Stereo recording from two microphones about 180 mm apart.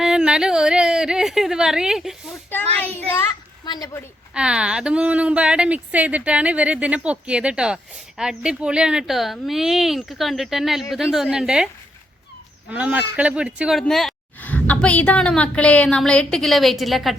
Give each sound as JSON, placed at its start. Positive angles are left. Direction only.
{"t": 0.0, "sound": "speech", "side_deg": -5}
{"t": 2.5, "sound": "a child's voice", "side_deg": 10}
{"t": 3.6, "sound": "speech", "side_deg": 20}
{"t": 4.4, "sound": "speech", "side_deg": -5}